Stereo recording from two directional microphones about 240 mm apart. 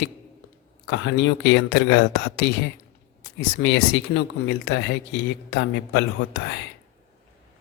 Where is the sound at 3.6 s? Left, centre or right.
Left.